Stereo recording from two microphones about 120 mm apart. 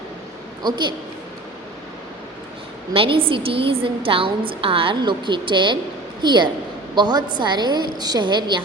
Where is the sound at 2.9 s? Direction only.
50° right (ahead or behind).